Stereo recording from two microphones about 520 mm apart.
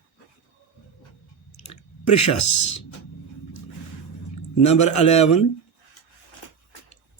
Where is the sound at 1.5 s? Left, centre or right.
Left.